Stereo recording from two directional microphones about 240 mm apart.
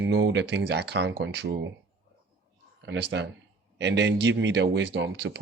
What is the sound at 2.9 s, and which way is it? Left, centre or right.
Speech, right.